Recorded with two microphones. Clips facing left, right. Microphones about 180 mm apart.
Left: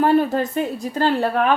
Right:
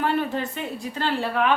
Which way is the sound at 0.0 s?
40° left (ahead or behind).